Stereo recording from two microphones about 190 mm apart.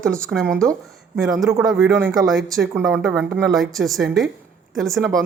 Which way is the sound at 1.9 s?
20° right (ahead or behind).